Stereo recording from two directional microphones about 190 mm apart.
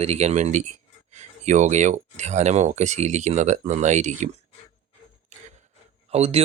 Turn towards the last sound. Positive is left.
turn(degrees=-35)  # may be behind; listen again after turning